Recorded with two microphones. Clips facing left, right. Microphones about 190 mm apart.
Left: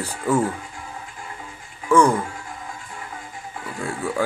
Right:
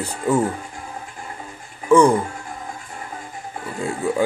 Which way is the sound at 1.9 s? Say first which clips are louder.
Right 3 dB; 20° right (ahead or behind).